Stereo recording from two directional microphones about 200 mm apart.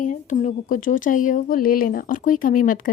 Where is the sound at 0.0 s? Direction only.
40° left (ahead or behind).